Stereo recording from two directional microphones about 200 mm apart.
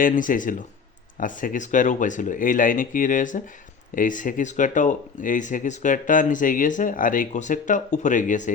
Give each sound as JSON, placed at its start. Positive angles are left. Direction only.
{"t": 0.0, "sound": "speech", "side_deg": 40}